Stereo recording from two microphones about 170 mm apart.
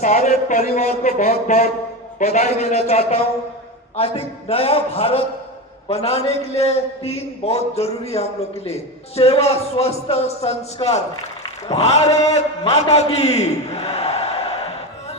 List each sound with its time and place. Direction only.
0.0 s a man's voice: 40° left (ahead or behind)